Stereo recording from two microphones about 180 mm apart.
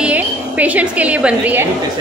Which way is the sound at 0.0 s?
10° right (ahead or behind).